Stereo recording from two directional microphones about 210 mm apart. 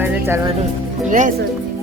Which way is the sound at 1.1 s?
40° right (ahead or behind).